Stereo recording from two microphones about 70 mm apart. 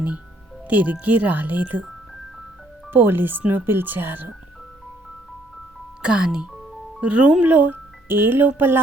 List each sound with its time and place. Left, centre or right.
0.7 s speech: right
2.9 s speech: right
6.0 s speech: centre